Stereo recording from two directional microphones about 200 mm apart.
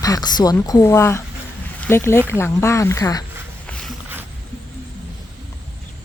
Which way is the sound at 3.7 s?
5° left (ahead or behind).